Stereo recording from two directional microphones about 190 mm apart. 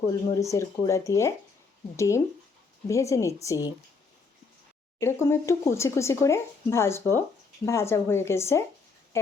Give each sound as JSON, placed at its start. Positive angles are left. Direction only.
{"t": 0.5, "sound": "speech", "side_deg": 15}
{"t": 4.9, "sound": "speech", "side_deg": 15}